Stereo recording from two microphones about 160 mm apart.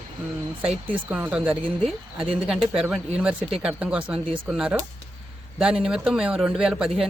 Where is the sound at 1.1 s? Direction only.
5° right (ahead or behind).